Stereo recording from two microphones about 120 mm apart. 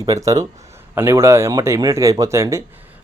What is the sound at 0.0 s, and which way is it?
A man's voice, 30° right (ahead or behind).